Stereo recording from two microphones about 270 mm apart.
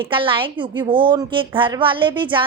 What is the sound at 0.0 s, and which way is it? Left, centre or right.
A woman's voice, centre.